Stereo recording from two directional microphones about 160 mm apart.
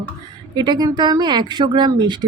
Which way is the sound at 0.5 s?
25° right (ahead or behind).